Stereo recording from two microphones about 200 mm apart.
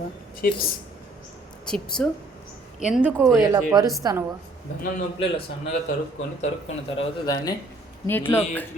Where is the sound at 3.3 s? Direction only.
20° right (ahead or behind).